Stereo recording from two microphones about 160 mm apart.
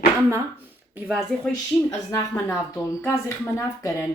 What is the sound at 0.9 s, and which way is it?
Speech, 10° right (ahead or behind).